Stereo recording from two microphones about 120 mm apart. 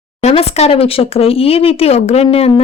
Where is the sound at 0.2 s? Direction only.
65° left (ahead or behind).